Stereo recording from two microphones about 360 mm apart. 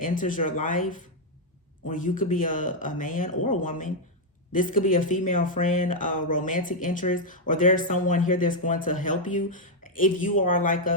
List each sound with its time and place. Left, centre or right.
0.0 s speech: left